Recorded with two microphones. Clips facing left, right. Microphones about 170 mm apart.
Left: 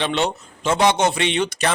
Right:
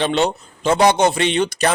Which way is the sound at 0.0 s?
40° right (ahead or behind).